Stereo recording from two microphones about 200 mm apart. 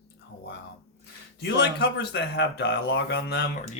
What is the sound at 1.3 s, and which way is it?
Speech, 55° left (ahead or behind).